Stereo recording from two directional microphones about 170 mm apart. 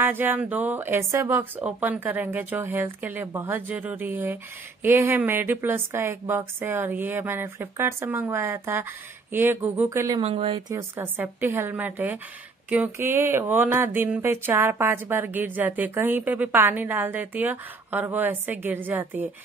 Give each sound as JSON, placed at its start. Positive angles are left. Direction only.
{"t": 0.0, "sound": "speech", "side_deg": -10}
{"t": 10.2, "sound": "speech", "side_deg": -35}
{"t": 10.7, "sound": "speech", "side_deg": -20}